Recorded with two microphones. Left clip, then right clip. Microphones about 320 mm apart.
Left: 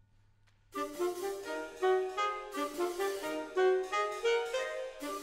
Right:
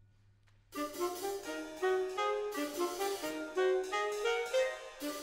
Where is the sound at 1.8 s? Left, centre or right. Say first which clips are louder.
Left 3 dB; left.